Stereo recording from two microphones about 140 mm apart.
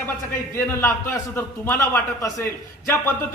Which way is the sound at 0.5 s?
15° left (ahead or behind).